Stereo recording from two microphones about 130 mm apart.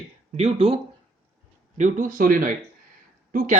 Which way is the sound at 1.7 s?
75° right (ahead or behind).